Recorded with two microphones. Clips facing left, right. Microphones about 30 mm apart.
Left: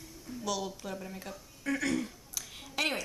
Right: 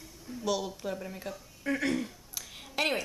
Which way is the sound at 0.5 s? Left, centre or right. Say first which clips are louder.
Right 4 dB; centre.